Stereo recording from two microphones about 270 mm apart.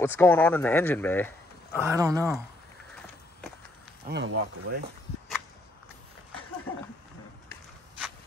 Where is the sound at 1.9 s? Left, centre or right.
Centre.